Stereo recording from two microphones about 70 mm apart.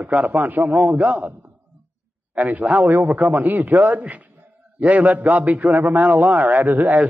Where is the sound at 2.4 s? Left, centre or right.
Right.